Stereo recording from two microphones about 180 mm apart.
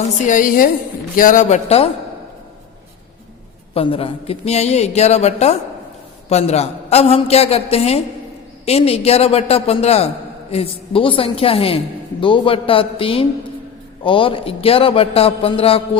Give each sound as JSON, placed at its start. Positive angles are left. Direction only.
{"t": 0.3, "sound": "a man's voice", "side_deg": 45}
{"t": 3.8, "sound": "a man's voice", "side_deg": 30}